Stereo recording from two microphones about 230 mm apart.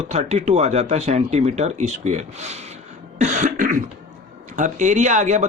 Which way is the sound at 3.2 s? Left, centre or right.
Right.